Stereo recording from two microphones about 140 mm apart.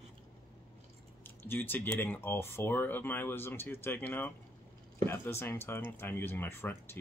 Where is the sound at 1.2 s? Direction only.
15° left (ahead or behind).